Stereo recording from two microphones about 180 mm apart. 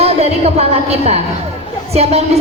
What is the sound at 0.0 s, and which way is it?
A woman's voice, 35° right (ahead or behind).